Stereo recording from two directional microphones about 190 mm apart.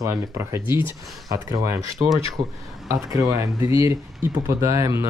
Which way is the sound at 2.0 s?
30° right (ahead or behind).